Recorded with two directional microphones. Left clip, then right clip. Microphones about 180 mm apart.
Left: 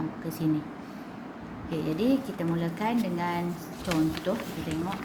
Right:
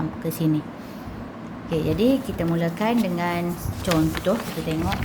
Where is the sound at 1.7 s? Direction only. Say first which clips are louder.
Right 6 dB; 25° right (ahead or behind).